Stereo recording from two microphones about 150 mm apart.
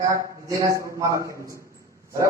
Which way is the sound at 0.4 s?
20° right (ahead or behind).